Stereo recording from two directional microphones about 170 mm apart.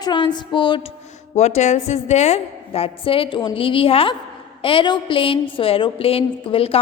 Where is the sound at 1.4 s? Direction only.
40° left (ahead or behind).